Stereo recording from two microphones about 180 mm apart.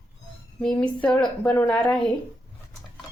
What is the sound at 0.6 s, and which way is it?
Speech, 5° left (ahead or behind).